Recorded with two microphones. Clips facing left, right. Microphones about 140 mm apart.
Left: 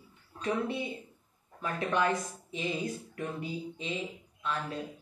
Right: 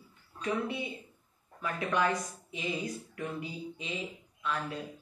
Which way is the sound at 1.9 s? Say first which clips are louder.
Left 1 dB; 25° left (ahead or behind).